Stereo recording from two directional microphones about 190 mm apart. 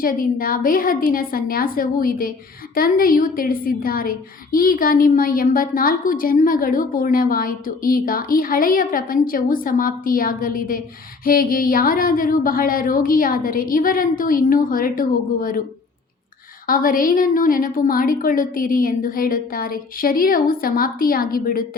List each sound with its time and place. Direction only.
0.0 s a woman's voice: 45° left (ahead or behind)
16.6 s a woman's voice: 45° left (ahead or behind)